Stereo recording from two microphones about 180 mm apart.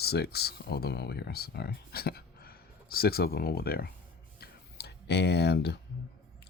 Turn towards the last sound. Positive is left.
turn(degrees=65)  # may be behind; listen again after turning